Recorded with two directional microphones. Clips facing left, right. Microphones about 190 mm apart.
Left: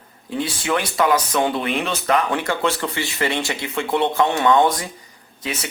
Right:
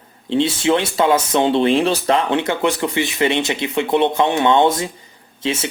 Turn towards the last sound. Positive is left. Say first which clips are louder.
# right 7 dB
turn(degrees=-25)  # may be behind; listen again after turning